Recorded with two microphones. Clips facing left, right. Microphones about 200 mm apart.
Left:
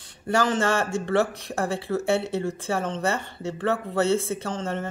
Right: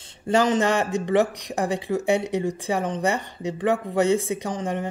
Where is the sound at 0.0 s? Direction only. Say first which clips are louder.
Right 3 dB; 20° right (ahead or behind).